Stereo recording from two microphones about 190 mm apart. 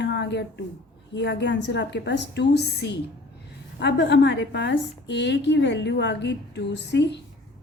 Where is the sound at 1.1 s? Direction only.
65° left (ahead or behind).